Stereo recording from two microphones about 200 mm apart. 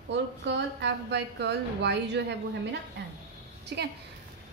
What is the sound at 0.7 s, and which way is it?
A woman's voice, 60° right (ahead or behind).